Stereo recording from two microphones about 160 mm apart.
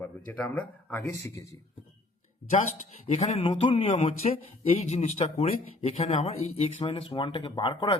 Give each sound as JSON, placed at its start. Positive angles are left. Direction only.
{"t": 0.0, "sound": "speech", "side_deg": 10}
{"t": 2.5, "sound": "speech", "side_deg": 45}